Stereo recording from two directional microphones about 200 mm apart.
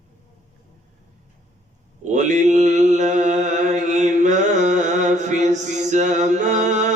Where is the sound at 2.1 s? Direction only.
35° right (ahead or behind).